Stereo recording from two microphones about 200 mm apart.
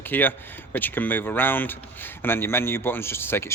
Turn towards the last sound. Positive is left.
turn(degrees=10)  # may be behind; listen again after turning